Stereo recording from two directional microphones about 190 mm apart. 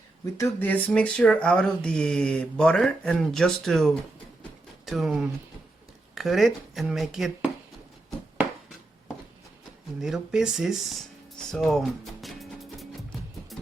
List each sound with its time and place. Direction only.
0.3 s speech: 15° left (ahead or behind)
10.0 s speech: 5° right (ahead or behind)
11.3 s music: centre (ahead or behind)